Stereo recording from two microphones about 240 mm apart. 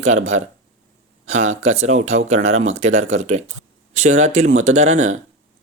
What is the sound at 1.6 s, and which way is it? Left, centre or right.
Speech, right.